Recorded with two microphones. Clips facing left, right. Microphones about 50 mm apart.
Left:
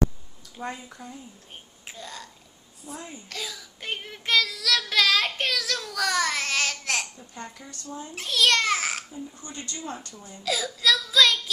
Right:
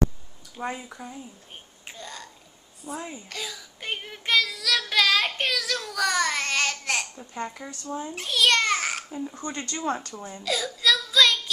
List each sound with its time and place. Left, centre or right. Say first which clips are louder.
0.6 s speech: right 3 dB; centre
1.9 s a sound: even; centre
2.8 s speech: right 4 dB; centre
3.3 s child singing: even; centre
7.2 s speech: right 6 dB; right
8.1 s a child's voice: even; centre
9.1 s speech: right 6 dB; right
9.8 s speech: right 10 dB; right
10.4 s child singing: even; centre